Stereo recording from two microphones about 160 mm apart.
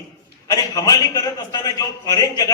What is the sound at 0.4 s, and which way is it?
A man's voice, 25° left (ahead or behind).